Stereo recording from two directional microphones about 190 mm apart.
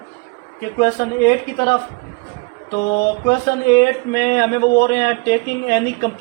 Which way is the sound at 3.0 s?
55° left (ahead or behind).